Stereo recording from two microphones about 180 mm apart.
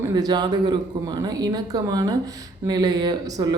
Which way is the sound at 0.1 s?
20° right (ahead or behind).